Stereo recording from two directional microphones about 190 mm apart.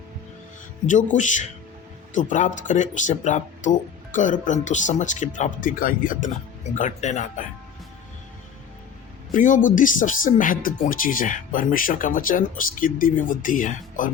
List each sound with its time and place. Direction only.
1.1 s speech: 40° left (ahead or behind)
9.3 s speech: 45° left (ahead or behind)